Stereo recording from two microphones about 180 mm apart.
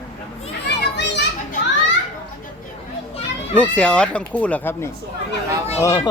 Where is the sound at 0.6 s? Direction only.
75° left (ahead or behind).